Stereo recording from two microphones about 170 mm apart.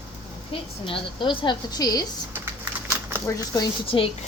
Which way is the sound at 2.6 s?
15° right (ahead or behind).